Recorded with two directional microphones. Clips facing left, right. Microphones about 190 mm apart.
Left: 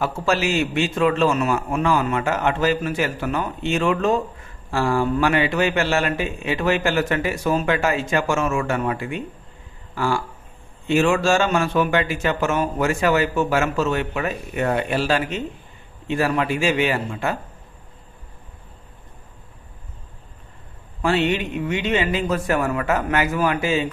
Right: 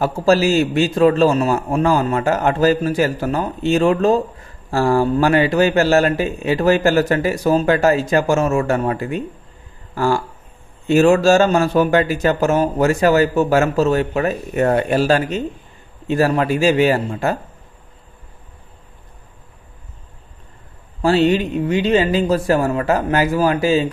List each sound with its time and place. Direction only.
0.0 s a man's voice: 35° right (ahead or behind)
9.9 s a sound: 40° right (ahead or behind)
10.9 s a man's voice: 40° right (ahead or behind)
21.0 s a man's voice: 35° right (ahead or behind)